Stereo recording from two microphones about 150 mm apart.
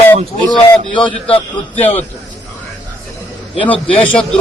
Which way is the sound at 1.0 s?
35° left (ahead or behind).